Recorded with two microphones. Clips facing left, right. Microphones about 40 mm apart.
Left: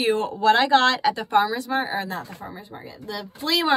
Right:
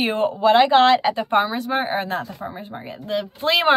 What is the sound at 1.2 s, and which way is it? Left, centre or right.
A woman's voice, right.